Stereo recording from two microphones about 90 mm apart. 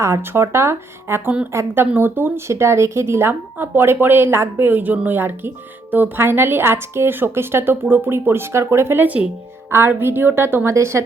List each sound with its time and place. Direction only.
0.0 s speech: 30° right (ahead or behind)
9.0 s speech: 15° right (ahead or behind)
9.6 s speech: 25° right (ahead or behind)